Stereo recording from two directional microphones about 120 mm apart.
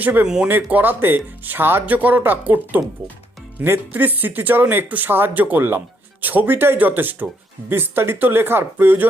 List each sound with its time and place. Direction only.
0.0 s speech: 15° right (ahead or behind)